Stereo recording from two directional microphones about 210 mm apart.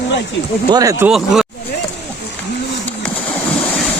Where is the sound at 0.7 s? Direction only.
15° right (ahead or behind).